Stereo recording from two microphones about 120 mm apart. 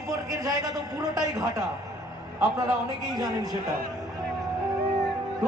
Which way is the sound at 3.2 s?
35° right (ahead or behind).